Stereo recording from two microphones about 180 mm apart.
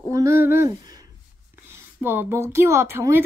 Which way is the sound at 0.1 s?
15° right (ahead or behind).